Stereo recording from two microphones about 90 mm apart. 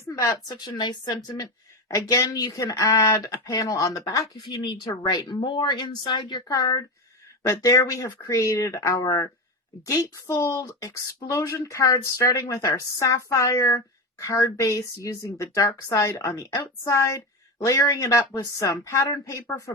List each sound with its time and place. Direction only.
0.0 s speech: 35° left (ahead or behind); by 1.2 s 50° left (ahead or behind)
1.9 s speech: 40° left (ahead or behind)
4.5 s speech: 60° left (ahead or behind); by 19.7 s 35° left (ahead or behind)